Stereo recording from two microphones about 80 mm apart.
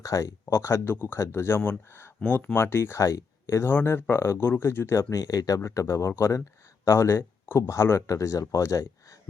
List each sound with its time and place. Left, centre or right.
0.0 s speech: left
3.7 s speech: left
5.1 s speech: left